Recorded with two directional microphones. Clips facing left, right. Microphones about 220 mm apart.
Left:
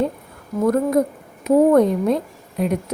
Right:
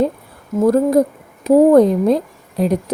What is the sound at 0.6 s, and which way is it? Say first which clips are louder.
Speech: right 4 dB; 30° right (ahead or behind).